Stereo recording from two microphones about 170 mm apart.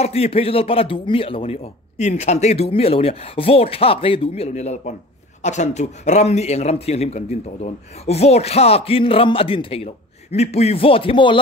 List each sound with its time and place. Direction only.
0.0 s a man's voice: 35° left (ahead or behind)